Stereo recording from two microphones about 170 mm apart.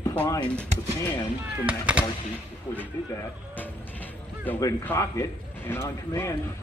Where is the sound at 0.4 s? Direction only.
5° left (ahead or behind).